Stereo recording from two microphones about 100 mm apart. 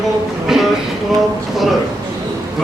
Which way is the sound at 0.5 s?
5° right (ahead or behind).